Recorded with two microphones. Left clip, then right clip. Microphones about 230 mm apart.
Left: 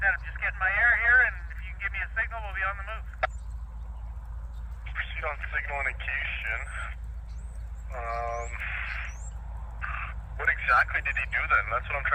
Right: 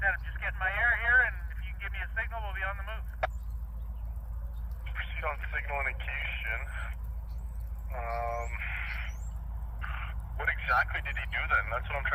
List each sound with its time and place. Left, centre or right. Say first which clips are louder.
0.3 s vehicle: left 5 dB; left
4.9 s radio: left 3 dB; left
7.9 s a sound: left 2 dB; left